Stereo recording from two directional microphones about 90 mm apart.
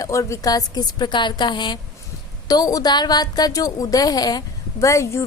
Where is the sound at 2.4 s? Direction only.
45° left (ahead or behind).